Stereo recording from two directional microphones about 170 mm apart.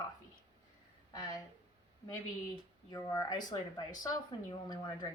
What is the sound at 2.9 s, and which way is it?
A woman's voice, 20° left (ahead or behind).